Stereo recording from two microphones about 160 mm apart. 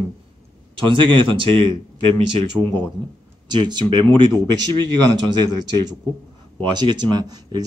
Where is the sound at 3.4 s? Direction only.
25° right (ahead or behind).